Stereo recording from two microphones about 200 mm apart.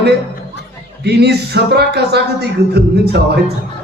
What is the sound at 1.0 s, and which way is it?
Speech, 55° right (ahead or behind).